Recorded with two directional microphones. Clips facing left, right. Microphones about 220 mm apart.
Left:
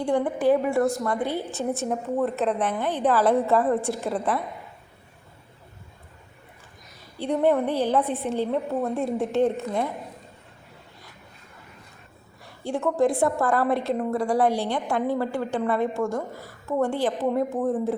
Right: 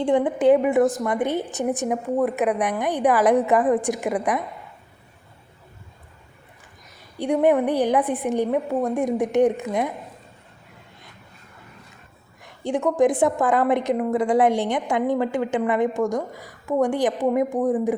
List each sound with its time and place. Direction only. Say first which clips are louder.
0.0 s a woman's voice: right 4 dB; 20° right (ahead or behind)
7.2 s a woman's voice: right 3 dB; 15° right (ahead or behind)
12.4 s a sound: right 4 dB; 20° right (ahead or behind)
13.0 s a woman's voice: right 3 dB; 15° right (ahead or behind)